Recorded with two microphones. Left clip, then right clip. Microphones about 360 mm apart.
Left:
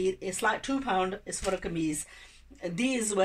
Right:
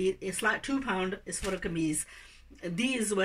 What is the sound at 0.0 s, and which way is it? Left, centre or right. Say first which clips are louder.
Speech: left 1 dB; centre.